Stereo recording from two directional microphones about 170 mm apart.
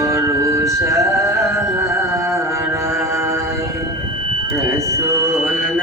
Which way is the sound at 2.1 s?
15° right (ahead or behind).